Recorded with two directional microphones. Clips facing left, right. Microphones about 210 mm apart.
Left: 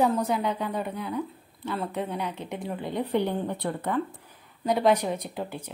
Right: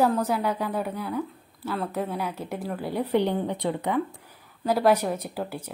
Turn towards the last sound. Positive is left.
turn(degrees=-5)  # may be behind; listen again after turning